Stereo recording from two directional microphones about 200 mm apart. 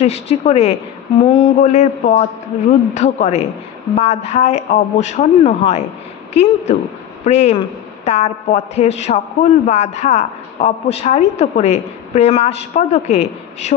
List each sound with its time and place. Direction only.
0.0 s a woman's voice: 30° left (ahead or behind)